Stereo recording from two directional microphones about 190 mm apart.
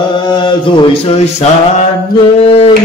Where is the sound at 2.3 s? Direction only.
30° left (ahead or behind).